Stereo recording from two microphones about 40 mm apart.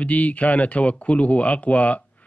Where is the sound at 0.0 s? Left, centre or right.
Left.